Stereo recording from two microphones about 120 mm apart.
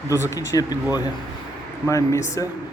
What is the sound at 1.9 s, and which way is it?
Speech, 25° left (ahead or behind).